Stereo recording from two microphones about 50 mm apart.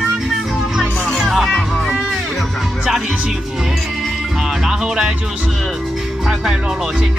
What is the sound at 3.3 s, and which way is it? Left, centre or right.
Speech, centre.